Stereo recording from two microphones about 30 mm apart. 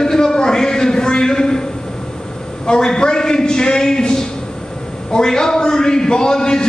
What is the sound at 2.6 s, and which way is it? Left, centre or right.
A man's voice, left.